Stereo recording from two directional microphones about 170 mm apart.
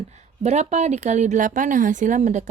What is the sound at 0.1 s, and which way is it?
A woman's voice, 40° right (ahead or behind).